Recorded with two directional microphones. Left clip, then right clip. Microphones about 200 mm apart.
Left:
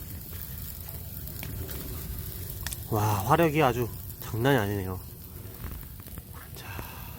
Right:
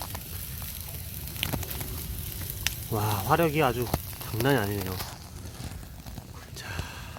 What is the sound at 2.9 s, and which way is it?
Speech, 20° left (ahead or behind).